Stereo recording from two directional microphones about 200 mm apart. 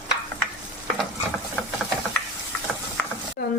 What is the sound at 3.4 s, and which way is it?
Speech, 50° left (ahead or behind).